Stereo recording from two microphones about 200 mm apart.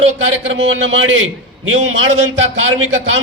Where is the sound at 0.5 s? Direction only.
70° right (ahead or behind).